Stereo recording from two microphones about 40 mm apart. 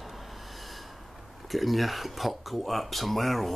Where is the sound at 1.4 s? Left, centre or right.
Centre.